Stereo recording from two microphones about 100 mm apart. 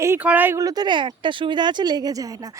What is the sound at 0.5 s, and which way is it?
Speech, 40° right (ahead or behind).